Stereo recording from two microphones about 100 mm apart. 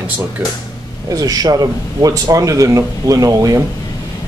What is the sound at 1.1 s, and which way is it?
Speech, 40° right (ahead or behind).